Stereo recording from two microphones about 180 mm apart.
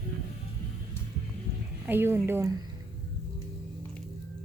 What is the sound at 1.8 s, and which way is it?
Speech, 10° right (ahead or behind).